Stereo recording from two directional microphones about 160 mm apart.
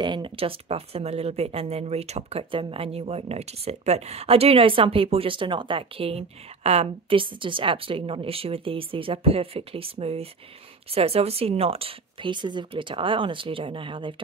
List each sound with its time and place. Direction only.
0.0 s speech: 30° right (ahead or behind)